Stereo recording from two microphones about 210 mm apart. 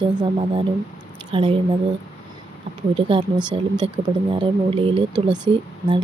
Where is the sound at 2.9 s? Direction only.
25° right (ahead or behind).